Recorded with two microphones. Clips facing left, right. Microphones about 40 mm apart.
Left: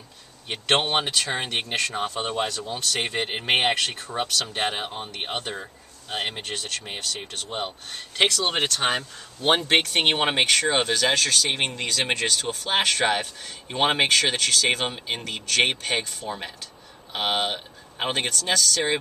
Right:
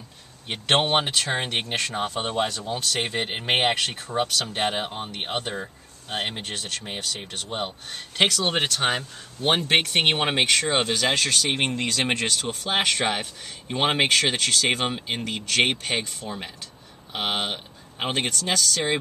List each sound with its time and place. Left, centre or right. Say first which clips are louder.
0.5 s speech: right 1 dB; centre
11.1 s speech: even; centre
18.4 s speech: left 1 dB; centre